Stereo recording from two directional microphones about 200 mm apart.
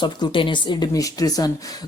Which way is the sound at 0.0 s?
25° left (ahead or behind).